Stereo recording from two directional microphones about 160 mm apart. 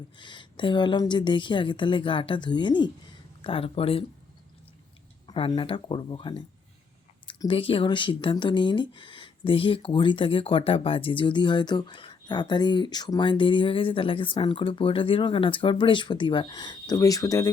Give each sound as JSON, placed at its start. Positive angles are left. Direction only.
{"t": 0.2, "sound": "a woman's voice", "side_deg": 30}
{"t": 5.3, "sound": "speech", "side_deg": 30}